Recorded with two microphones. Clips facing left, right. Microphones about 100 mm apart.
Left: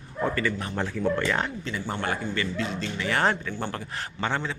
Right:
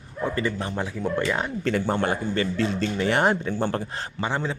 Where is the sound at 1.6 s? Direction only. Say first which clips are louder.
Right 8 dB; 55° right (ahead or behind).